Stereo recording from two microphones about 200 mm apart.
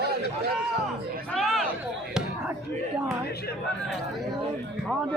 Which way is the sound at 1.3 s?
Centre (ahead or behind).